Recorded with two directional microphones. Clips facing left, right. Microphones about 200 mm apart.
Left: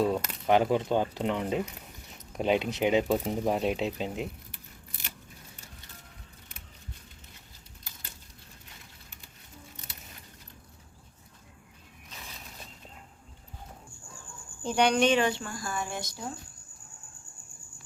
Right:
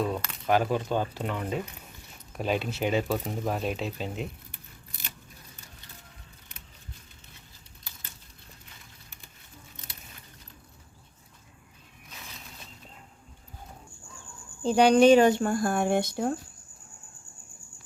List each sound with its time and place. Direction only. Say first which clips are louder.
0.0 s speech: left 3 dB; 20° left (ahead or behind)
14.6 s speech: right 6 dB; 30° right (ahead or behind); by 16.3 s 60° right (ahead or behind)